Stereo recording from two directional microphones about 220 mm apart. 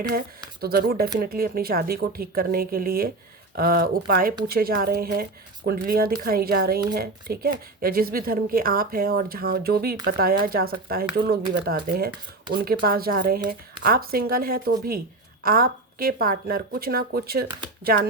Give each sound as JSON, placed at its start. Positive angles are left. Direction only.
{"t": 0.6, "sound": "speech", "side_deg": -45}